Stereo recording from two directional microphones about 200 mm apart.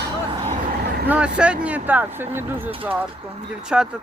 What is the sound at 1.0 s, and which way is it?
Speech, 5° right (ahead or behind).